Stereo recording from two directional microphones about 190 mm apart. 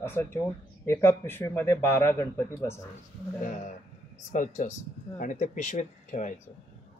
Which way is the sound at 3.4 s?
40° left (ahead or behind).